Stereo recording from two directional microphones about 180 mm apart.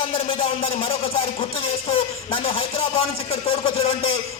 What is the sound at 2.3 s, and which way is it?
A man's voice, 30° left (ahead or behind).